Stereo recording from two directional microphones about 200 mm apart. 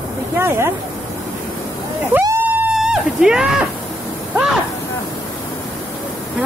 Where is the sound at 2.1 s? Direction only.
5° right (ahead or behind).